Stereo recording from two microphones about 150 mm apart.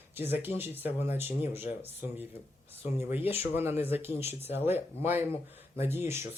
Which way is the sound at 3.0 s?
15° right (ahead or behind).